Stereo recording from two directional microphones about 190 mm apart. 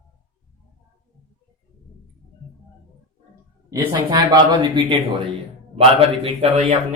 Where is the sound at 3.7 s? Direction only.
20° right (ahead or behind).